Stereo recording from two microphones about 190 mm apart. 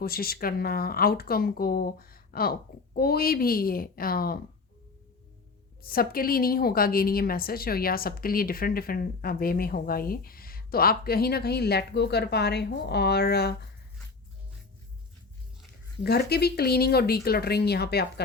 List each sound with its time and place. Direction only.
0.0 s a woman's voice: 50° left (ahead or behind)
5.8 s a woman's voice: 50° left (ahead or behind)
16.0 s speech: 55° left (ahead or behind)